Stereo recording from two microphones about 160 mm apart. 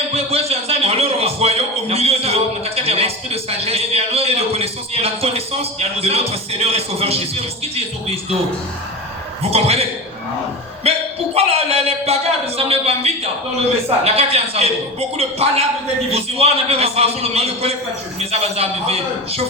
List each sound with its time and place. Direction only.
0.1 s a man's voice: 40° right (ahead or behind)
9.4 s a man's voice: 40° right (ahead or behind)
10.8 s a man's voice: 40° right (ahead or behind)